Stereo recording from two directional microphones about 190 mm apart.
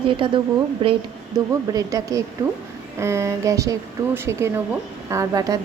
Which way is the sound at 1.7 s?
15° right (ahead or behind).